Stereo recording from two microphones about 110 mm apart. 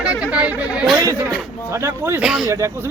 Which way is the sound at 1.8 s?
20° right (ahead or behind).